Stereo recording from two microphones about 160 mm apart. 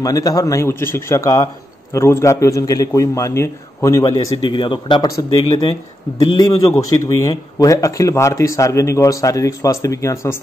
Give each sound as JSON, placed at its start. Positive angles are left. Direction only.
{"t": 0.0, "sound": "a man's voice", "side_deg": 20}